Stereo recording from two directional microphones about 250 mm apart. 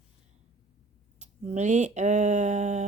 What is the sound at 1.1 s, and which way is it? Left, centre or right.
Speech, right.